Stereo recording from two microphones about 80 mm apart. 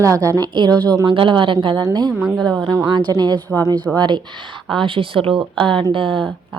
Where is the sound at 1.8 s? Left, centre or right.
Right.